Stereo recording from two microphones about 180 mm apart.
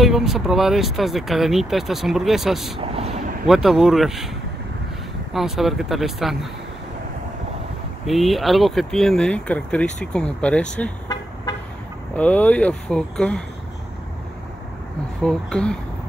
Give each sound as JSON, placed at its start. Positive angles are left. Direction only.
{"t": 0.0, "sound": "speech", "side_deg": 0}
{"t": 2.8, "sound": "speech", "side_deg": -35}
{"t": 3.4, "sound": "speech", "side_deg": 0}
{"t": 5.3, "sound": "speech", "side_deg": 0}
{"t": 8.1, "sound": "speech", "side_deg": 0}
{"t": 12.2, "sound": "speech", "side_deg": 10}
{"t": 15.2, "sound": "speech", "side_deg": 5}